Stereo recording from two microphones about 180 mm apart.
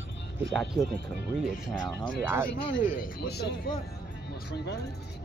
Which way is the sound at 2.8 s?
50° left (ahead or behind).